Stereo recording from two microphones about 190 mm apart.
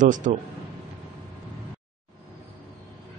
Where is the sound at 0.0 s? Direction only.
40° right (ahead or behind).